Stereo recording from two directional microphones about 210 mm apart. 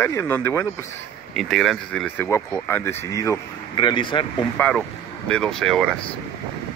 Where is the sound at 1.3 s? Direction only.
Centre (ahead or behind); by 4.2 s 25° left (ahead or behind).